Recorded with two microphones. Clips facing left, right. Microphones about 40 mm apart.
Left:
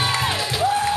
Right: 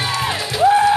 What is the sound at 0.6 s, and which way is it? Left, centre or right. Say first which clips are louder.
Music: right 9 dB; right.